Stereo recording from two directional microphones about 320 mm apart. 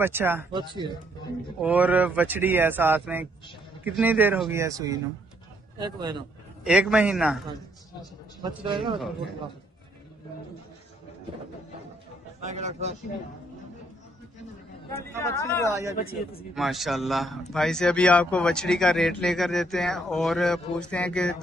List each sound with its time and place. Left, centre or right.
0.0 s speech: centre
6.6 s speech: centre
12.4 s a man's voice: right
14.9 s speech: centre
15.7 s speech: centre